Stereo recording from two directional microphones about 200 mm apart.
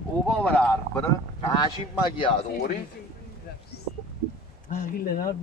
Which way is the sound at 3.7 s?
55° left (ahead or behind).